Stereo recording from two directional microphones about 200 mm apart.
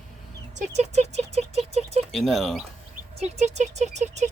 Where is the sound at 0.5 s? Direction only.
35° right (ahead or behind).